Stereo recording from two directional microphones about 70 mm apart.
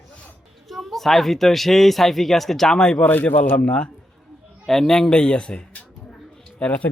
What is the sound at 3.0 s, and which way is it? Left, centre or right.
Speech, left.